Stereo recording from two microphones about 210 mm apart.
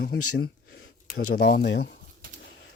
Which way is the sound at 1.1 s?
50° left (ahead or behind).